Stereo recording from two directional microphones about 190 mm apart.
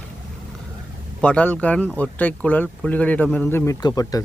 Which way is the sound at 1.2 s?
5° left (ahead or behind).